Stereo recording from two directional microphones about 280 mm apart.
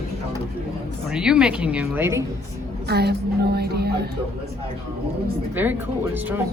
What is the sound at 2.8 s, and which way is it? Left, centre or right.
A woman's voice, right.